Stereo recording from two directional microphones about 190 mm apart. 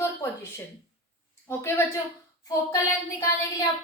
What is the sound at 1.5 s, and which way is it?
Speech, 10° left (ahead or behind).